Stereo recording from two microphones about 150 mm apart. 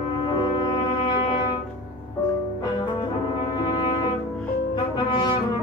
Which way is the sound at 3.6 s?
30° left (ahead or behind).